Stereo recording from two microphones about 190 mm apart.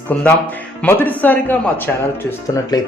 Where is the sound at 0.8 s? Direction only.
10° left (ahead or behind).